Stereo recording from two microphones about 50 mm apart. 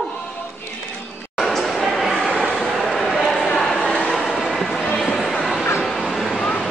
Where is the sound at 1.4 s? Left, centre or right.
Centre.